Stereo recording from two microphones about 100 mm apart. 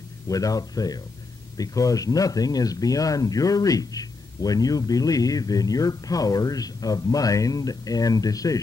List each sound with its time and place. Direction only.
0.3 s speech: 35° left (ahead or behind)